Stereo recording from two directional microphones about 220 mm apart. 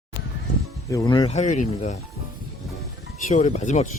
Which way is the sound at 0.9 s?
15° left (ahead or behind).